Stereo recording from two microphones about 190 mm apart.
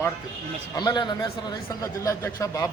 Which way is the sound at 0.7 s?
20° left (ahead or behind).